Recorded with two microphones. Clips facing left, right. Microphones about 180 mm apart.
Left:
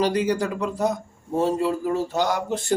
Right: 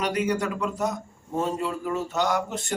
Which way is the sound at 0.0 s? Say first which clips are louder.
Left 4 dB; 30° left (ahead or behind).